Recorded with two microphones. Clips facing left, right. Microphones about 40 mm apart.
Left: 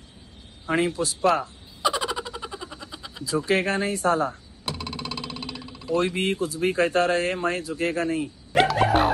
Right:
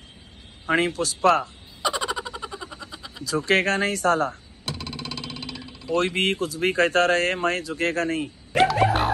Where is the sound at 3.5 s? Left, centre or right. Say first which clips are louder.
Right 3 dB; right.